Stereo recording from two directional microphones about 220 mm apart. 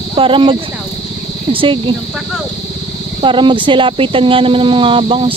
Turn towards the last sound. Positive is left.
turn(degrees=-25)  # may be behind; listen again after turning